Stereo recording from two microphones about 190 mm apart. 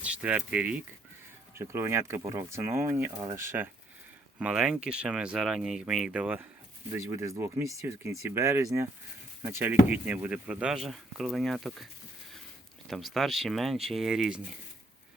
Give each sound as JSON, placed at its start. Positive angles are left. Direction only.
{"t": 0.0, "sound": "speech", "side_deg": -5}
{"t": 12.9, "sound": "speech", "side_deg": 0}